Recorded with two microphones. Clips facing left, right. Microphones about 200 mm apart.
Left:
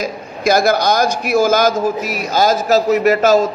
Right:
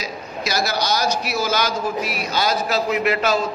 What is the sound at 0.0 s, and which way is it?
A man's voice, 50° left (ahead or behind).